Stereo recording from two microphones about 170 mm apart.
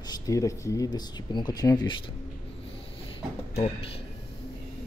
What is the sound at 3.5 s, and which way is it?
Speech, 35° left (ahead or behind).